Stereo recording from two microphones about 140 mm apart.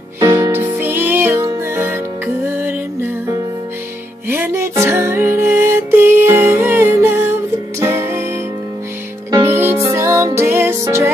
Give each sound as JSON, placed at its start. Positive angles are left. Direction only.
{"t": 0.2, "sound": "music", "side_deg": -20}
{"t": 4.3, "sound": "music", "side_deg": -20}
{"t": 9.3, "sound": "music", "side_deg": -20}